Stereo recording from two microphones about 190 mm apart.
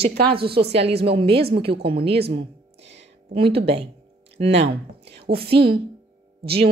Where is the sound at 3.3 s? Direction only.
30° right (ahead or behind).